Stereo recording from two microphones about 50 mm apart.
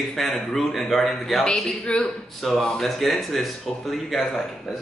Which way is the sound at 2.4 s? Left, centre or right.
Centre.